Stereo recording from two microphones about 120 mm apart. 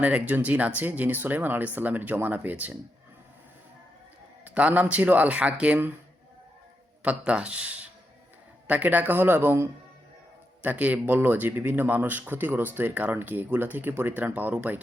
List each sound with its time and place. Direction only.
0.0 s speech: 10° right (ahead or behind)
4.4 s speech: 10° right (ahead or behind)
7.0 s speech: 10° right (ahead or behind)